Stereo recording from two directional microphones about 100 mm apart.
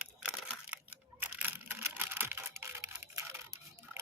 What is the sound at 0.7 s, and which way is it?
Camera, 20° right (ahead or behind).